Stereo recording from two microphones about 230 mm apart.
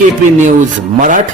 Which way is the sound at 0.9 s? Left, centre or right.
Right.